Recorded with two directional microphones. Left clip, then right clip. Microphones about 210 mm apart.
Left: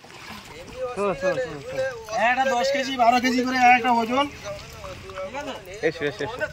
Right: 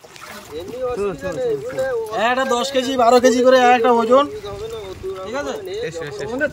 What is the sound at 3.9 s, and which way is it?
Speech, 10° right (ahead or behind).